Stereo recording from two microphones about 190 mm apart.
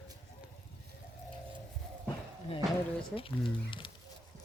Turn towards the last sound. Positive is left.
turn(degrees=25)  # may be behind; listen again after turning